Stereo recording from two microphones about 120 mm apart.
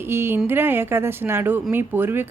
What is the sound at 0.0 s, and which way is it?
Speech, 20° right (ahead or behind).